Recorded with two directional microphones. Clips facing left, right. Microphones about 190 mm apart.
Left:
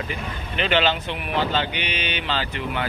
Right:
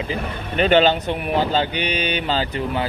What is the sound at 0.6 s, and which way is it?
A man's voice, 40° right (ahead or behind).